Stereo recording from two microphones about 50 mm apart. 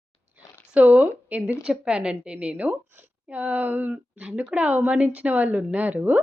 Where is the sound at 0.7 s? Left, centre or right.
Right.